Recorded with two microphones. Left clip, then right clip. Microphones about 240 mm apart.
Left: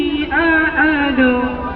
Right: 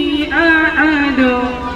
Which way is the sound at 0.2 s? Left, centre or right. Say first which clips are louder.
Right 3 dB; right.